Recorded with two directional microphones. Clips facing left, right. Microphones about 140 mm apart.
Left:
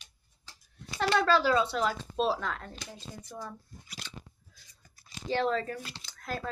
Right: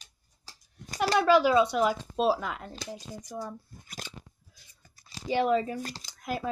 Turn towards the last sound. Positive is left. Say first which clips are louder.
# right 4 dB
turn(degrees=-15)  # may be behind; listen again after turning